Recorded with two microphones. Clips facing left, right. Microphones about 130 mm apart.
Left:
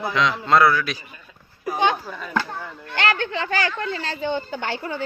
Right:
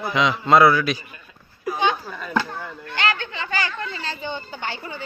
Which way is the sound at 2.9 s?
65° left (ahead or behind).